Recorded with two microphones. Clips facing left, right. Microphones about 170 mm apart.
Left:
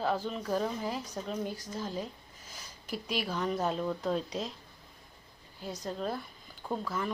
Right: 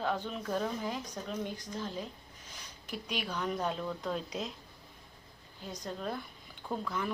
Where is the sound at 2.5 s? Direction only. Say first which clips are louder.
Left 3 dB; 40° left (ahead or behind).